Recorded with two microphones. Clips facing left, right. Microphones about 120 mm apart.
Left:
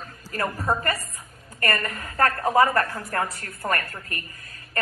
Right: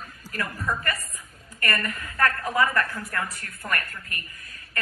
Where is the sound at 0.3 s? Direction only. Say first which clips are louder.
Left 4 dB; 35° left (ahead or behind).